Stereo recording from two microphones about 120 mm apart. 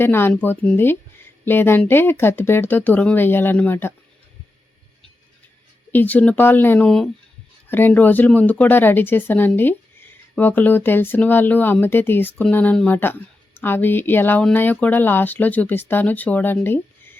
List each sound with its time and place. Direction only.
0.0 s speech: 20° left (ahead or behind)
5.9 s speech: 15° left (ahead or behind)
7.7 s speech: 15° left (ahead or behind)